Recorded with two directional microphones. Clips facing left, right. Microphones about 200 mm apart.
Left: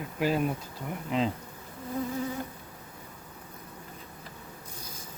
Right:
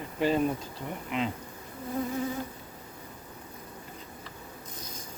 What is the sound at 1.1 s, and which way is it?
Speech, 35° left (ahead or behind).